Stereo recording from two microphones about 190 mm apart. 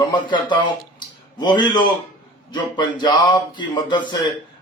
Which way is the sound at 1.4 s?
25° left (ahead or behind).